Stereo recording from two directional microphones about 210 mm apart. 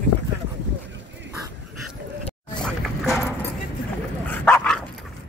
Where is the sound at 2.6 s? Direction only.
Centre (ahead or behind).